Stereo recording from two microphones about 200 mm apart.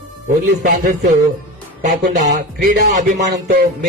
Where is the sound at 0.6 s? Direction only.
50° right (ahead or behind).